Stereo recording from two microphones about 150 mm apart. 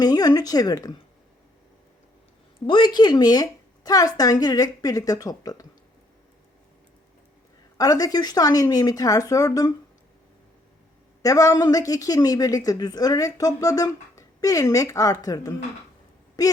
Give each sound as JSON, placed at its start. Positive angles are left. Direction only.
{"t": 0.0, "sound": "speech", "side_deg": 25}
{"t": 2.6, "sound": "speech", "side_deg": 30}
{"t": 7.8, "sound": "speech", "side_deg": 25}
{"t": 11.2, "sound": "speech", "side_deg": 25}